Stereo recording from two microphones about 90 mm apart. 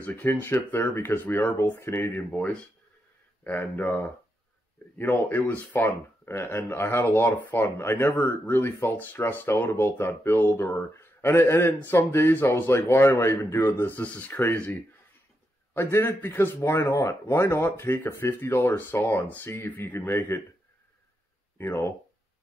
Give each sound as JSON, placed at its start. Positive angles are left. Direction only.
{"t": 0.0, "sound": "speech", "side_deg": 20}
{"t": 4.9, "sound": "speech", "side_deg": 20}
{"t": 15.7, "sound": "speech", "side_deg": 25}
{"t": 21.5, "sound": "speech", "side_deg": 20}